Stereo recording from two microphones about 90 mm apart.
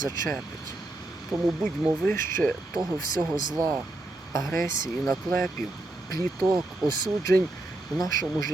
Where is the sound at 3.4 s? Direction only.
50° right (ahead or behind).